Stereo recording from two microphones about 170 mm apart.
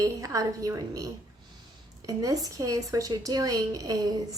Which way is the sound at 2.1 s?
20° right (ahead or behind).